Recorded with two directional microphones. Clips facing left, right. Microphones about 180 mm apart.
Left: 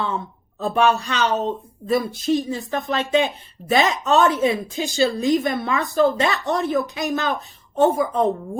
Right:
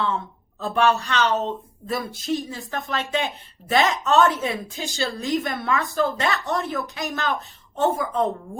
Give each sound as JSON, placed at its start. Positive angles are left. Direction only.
{"t": 0.6, "sound": "a woman's voice", "side_deg": 15}